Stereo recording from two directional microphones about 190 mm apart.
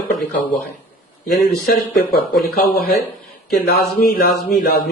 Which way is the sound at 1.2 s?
50° left (ahead or behind).